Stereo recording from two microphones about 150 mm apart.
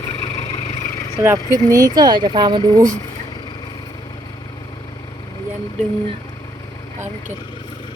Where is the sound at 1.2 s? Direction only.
20° right (ahead or behind).